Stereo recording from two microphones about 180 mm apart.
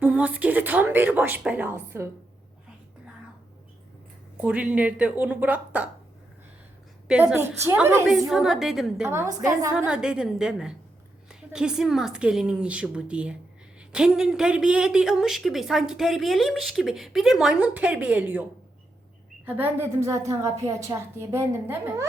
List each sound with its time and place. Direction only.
0.0 s a woman's voice: 10° right (ahead or behind)
4.4 s a woman's voice: 5° right (ahead or behind)
7.1 s a woman's voice: 5° right (ahead or behind)
8.0 s speech: centre (ahead or behind)
9.0 s a woman's voice: 15° right (ahead or behind)
9.7 s speech: 5° right (ahead or behind)
19.5 s a woman's voice: 10° right (ahead or behind)